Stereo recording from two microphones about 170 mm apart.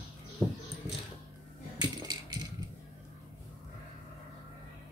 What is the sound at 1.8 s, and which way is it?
Coin, 25° right (ahead or behind).